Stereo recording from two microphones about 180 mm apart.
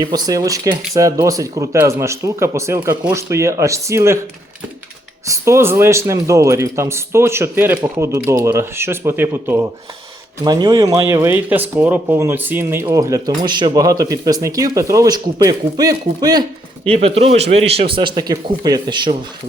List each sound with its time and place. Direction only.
0.0 s a man's voice: 20° right (ahead or behind)
5.2 s a man's voice: 15° right (ahead or behind)
16.9 s speech: 35° right (ahead or behind)